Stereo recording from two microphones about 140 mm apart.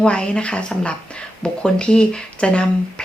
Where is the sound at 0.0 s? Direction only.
5° left (ahead or behind).